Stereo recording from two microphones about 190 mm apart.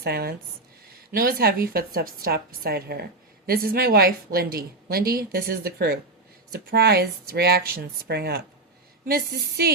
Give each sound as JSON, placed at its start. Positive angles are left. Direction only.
{"t": 0.0, "sound": "a woman's voice", "side_deg": -55}